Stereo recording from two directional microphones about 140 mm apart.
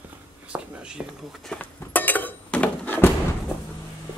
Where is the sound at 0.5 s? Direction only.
5° right (ahead or behind).